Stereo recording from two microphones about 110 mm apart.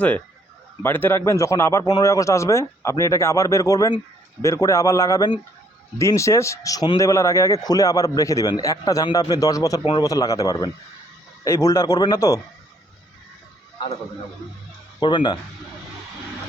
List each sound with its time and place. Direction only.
0.8 s a man's voice: 20° left (ahead or behind)
15.0 s speech: 45° left (ahead or behind)